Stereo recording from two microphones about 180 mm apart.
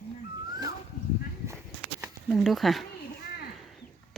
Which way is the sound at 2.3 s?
Centre (ahead or behind).